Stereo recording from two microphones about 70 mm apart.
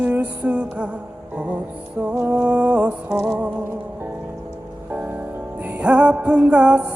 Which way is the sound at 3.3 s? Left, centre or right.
Right.